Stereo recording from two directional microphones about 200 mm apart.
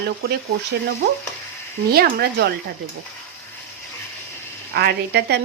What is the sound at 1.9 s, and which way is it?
Speech, 50° right (ahead or behind).